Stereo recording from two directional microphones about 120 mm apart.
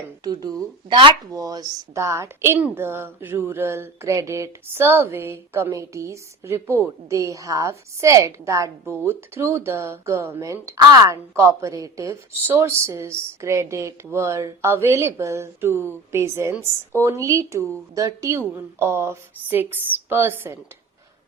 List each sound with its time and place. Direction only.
0.2 s speech: 30° right (ahead or behind)
0.9 s speech: 45° right (ahead or behind)
1.3 s a woman's voice: 30° right (ahead or behind)